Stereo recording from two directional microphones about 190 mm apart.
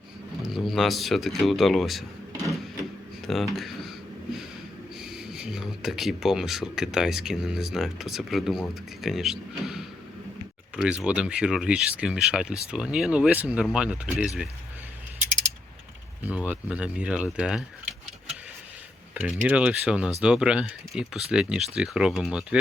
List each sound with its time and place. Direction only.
0.4 s speech: centre (ahead or behind)
3.2 s speech: centre (ahead or behind)
4.9 s speech: centre (ahead or behind)
16.2 s speech: 5° right (ahead or behind)
19.1 s speech: 5° right (ahead or behind)